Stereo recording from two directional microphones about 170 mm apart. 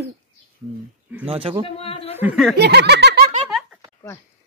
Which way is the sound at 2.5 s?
75° right (ahead or behind).